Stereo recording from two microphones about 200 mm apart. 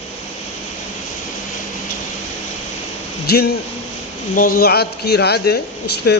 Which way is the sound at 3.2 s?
50° left (ahead or behind).